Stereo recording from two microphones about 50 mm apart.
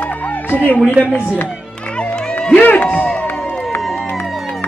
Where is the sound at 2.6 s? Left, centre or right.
Left.